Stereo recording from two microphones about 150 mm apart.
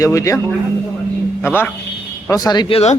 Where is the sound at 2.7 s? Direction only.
45° left (ahead or behind).